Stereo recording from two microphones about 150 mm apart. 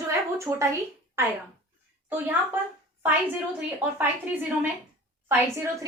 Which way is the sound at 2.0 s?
15° right (ahead or behind).